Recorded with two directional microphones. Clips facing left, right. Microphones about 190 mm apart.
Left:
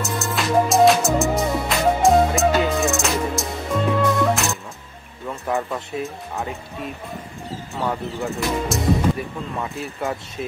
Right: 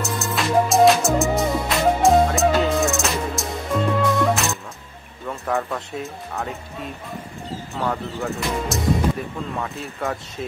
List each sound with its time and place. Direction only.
0.2 s music: centre (ahead or behind)
5.3 s a sound: centre (ahead or behind)
7.7 s speech: 5° left (ahead or behind)